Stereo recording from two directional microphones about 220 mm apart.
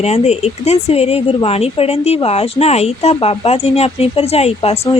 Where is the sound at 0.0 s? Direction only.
30° left (ahead or behind).